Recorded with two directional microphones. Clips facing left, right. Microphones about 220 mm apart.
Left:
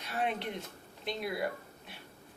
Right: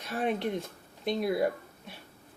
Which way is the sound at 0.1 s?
45° right (ahead or behind).